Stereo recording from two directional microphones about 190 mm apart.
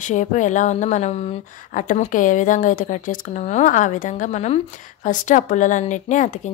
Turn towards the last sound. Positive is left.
turn(degrees=40)  # may be behind; listen again after turning